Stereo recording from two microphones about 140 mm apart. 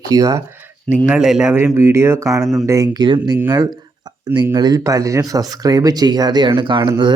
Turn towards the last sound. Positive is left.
turn(degrees=-35)  # may be behind; listen again after turning